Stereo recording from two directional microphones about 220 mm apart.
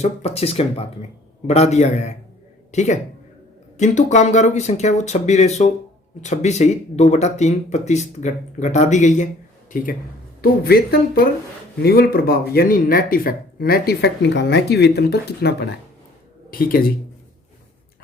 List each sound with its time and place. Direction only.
0.0 s speech: 30° left (ahead or behind)